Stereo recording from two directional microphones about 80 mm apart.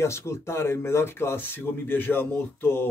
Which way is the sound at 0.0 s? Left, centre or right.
Left.